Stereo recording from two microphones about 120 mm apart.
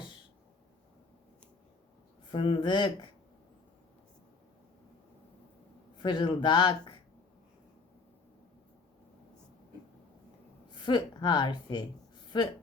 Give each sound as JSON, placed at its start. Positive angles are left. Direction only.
{"t": 2.3, "sound": "speech", "side_deg": 45}
{"t": 6.0, "sound": "a woman's voice", "side_deg": 40}
{"t": 10.8, "sound": "a woman's voice", "side_deg": 40}